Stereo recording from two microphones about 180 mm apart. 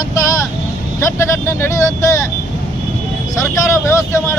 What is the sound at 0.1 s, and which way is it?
Vehicle, 15° left (ahead or behind).